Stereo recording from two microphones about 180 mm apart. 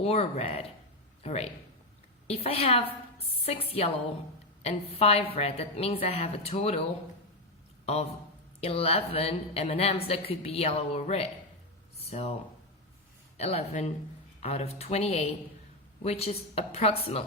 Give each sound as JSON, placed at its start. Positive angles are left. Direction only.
{"t": 0.0, "sound": "a woman's voice", "side_deg": 35}
{"t": 8.6, "sound": "a woman's voice", "side_deg": 35}
{"t": 13.3, "sound": "a woman's voice", "side_deg": 35}